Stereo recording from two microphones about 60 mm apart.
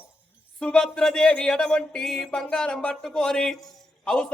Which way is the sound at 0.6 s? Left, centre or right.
Centre.